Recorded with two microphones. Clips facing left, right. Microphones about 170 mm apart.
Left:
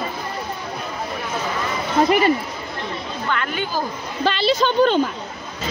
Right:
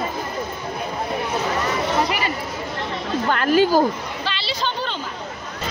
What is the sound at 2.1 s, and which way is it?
Speech, 45° left (ahead or behind).